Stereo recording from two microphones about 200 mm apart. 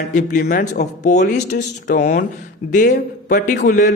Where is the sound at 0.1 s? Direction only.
40° left (ahead or behind).